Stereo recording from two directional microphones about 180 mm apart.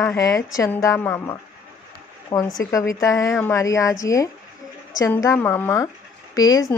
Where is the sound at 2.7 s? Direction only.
20° left (ahead or behind).